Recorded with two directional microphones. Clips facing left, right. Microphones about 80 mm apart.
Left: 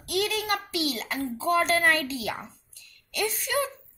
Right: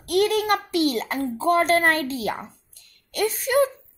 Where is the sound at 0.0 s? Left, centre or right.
Right.